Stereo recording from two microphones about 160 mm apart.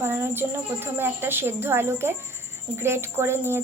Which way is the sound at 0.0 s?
15° right (ahead or behind).